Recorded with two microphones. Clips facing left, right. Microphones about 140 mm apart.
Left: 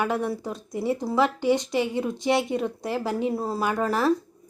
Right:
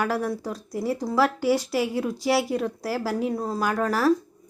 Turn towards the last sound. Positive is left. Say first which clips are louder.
# right 1 dB
turn(degrees=0)  # may be behind; listen again after turning